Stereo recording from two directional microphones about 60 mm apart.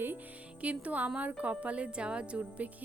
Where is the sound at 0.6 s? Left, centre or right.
Right.